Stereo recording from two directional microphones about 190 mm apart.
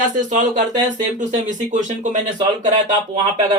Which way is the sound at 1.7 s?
40° right (ahead or behind).